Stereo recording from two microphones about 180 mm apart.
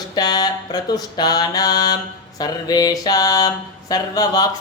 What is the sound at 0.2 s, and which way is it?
Speech, 20° left (ahead or behind).